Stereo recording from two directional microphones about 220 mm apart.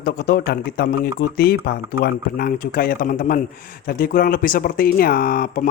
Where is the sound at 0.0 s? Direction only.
40° left (ahead or behind).